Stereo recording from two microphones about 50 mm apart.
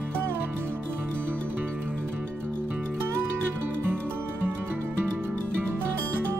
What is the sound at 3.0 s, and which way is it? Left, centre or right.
Music, right.